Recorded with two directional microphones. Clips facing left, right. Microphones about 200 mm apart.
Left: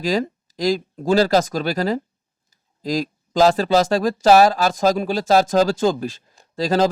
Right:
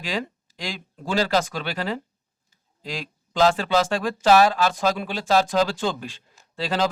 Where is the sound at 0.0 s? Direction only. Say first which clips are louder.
Left 8 dB; 40° left (ahead or behind).